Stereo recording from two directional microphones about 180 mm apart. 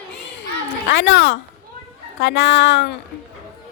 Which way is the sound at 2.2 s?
90° left.